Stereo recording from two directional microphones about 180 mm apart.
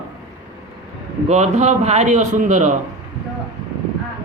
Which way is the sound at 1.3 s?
40° right (ahead or behind).